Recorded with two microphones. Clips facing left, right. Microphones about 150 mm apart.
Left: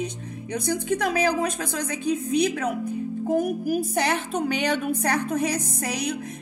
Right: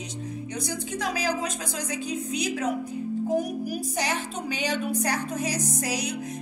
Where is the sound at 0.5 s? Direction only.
55° left (ahead or behind).